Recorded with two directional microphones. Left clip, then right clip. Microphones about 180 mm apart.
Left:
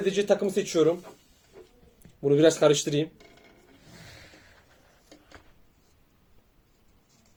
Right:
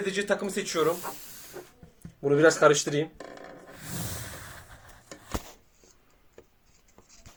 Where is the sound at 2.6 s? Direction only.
45° left (ahead or behind).